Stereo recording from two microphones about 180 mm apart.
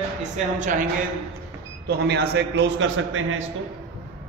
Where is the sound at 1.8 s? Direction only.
65° right (ahead or behind); by 3.4 s 90° right.